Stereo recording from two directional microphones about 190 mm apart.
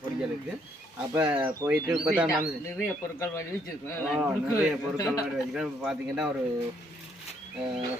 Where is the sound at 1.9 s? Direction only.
5° right (ahead or behind).